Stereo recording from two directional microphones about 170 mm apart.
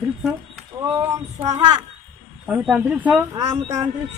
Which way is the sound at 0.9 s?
15° right (ahead or behind).